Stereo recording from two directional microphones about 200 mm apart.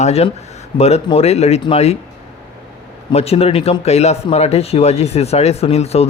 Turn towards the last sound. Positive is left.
turn(degrees=30)  # may be behind; listen again after turning